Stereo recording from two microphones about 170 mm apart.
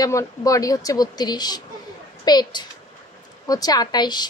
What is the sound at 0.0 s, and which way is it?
A woman's voice, 20° left (ahead or behind).